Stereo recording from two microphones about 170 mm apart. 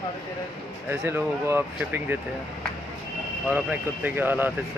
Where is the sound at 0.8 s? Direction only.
15° right (ahead or behind).